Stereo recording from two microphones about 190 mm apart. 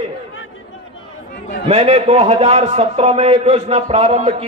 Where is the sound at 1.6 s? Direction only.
30° right (ahead or behind).